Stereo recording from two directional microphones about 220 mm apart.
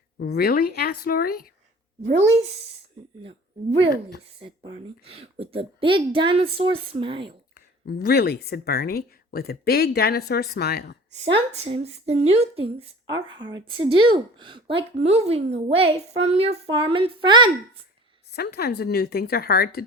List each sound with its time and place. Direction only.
0.2 s speech: 45° left (ahead or behind)
2.0 s speech: 30° right (ahead or behind)
7.9 s speech: 45° left (ahead or behind)
11.3 s speech: 25° right (ahead or behind)
18.3 s speech: 45° left (ahead or behind)